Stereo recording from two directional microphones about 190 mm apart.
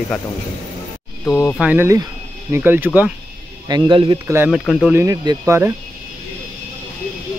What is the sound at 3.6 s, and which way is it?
Speech, 20° right (ahead or behind).